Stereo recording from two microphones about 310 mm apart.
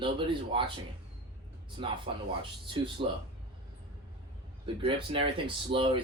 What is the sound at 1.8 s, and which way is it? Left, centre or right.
Speech, centre.